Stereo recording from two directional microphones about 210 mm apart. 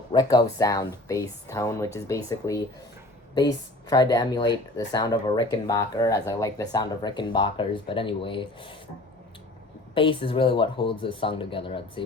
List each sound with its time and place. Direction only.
0.1 s speech: 20° left (ahead or behind)
9.9 s speech: 25° left (ahead or behind)